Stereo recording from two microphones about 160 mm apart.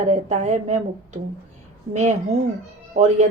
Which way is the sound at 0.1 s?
50° right (ahead or behind).